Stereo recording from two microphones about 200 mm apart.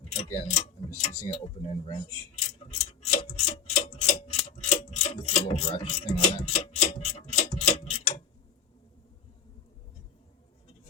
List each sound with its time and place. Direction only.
0.1 s speech: 30° left (ahead or behind)
2.6 s clock: 30° left (ahead or behind)
4.3 s mechanisms: 30° left (ahead or behind)
6.7 s clock: 30° left (ahead or behind)
7.8 s tick-tock: 30° left (ahead or behind)